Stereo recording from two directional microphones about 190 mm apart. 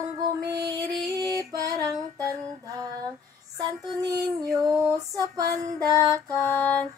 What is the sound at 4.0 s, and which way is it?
Female singing, 20° right (ahead or behind).